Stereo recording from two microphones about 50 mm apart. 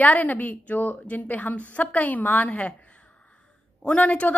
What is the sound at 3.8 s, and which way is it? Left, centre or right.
Speech, left.